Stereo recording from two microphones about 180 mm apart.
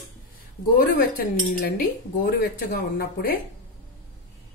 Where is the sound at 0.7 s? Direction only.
55° left (ahead or behind).